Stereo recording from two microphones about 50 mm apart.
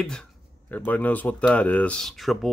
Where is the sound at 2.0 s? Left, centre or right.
Centre.